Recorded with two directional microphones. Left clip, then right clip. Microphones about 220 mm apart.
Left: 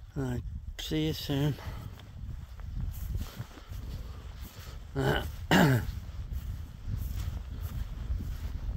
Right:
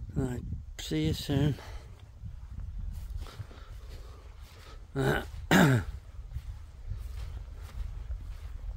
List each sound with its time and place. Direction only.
0.1 s speech: 15° right (ahead or behind)
4.9 s grunt: 25° right (ahead or behind)